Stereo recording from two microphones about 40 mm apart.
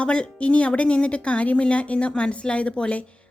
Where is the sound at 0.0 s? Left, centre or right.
Left.